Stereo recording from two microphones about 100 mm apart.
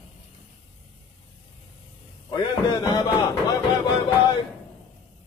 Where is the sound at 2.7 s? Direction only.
45° left (ahead or behind).